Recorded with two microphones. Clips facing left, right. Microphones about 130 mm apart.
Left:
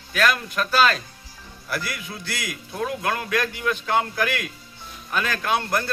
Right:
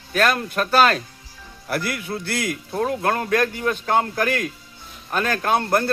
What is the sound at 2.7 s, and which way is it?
A man's voice, 40° right (ahead or behind).